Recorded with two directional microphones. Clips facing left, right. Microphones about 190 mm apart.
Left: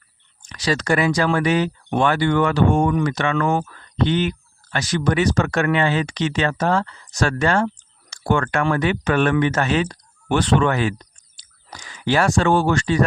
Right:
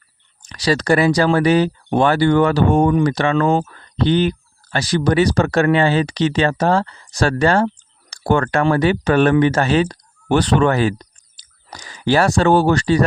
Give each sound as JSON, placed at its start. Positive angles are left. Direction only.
{"t": 0.4, "sound": "speech", "side_deg": -35}